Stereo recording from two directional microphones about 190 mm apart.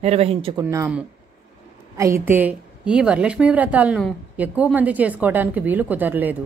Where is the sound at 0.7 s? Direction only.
15° right (ahead or behind).